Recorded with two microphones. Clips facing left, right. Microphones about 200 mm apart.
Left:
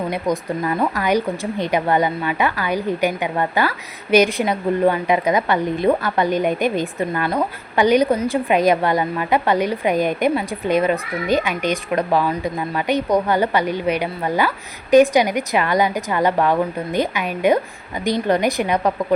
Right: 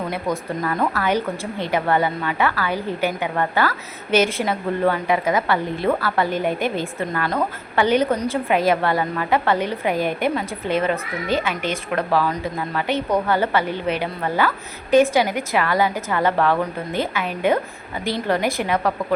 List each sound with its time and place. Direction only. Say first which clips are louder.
0.1 s speech: left 3 dB; 15° left (ahead or behind)